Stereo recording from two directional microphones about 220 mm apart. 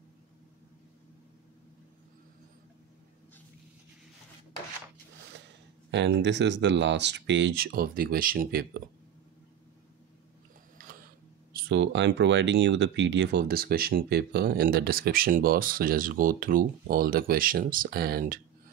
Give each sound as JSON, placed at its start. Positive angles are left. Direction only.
{"t": 5.9, "sound": "speech", "side_deg": -55}
{"t": 10.8, "sound": "printer", "side_deg": -40}
{"t": 11.5, "sound": "speech", "side_deg": -55}